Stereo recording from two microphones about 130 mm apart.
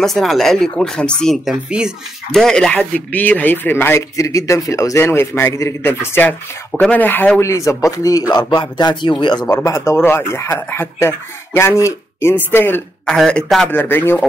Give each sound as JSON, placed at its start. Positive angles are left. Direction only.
{"t": 0.0, "sound": "speech", "side_deg": 0}
{"t": 9.5, "sound": "speech", "side_deg": 20}
{"t": 13.0, "sound": "a man's voice", "side_deg": 5}